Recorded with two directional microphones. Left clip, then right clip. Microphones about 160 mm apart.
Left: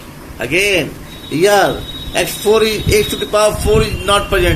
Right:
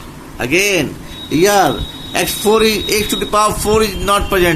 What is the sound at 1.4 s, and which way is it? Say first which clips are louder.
Speech: left 1 dB; 90° right.